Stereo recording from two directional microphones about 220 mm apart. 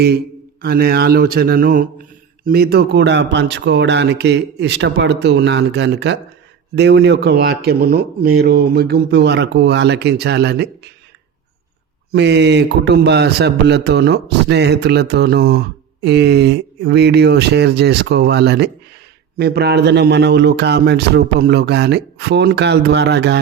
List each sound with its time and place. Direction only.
0.6 s speech: 45° right (ahead or behind)
12.1 s speech: 50° right (ahead or behind)